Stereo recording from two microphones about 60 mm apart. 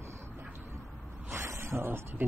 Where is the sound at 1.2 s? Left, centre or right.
Right.